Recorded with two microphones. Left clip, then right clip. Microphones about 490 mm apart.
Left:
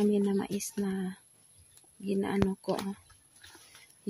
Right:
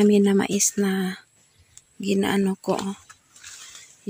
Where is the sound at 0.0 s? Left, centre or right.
Left.